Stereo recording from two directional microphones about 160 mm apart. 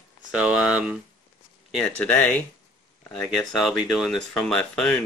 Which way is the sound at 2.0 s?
10° left (ahead or behind).